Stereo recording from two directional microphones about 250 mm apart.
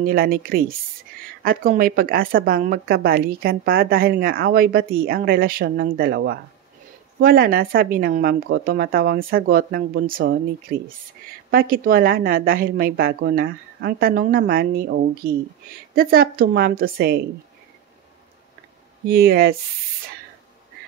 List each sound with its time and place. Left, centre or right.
0.0 s speech: right
19.0 s speech: right